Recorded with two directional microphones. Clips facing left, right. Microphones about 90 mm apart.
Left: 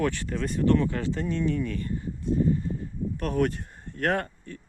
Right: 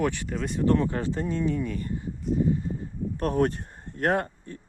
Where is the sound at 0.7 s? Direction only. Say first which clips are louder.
Even; 30° right (ahead or behind).